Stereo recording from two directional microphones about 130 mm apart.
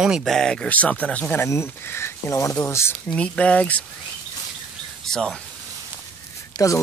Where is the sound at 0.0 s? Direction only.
Centre (ahead or behind); by 3.0 s 20° left (ahead or behind).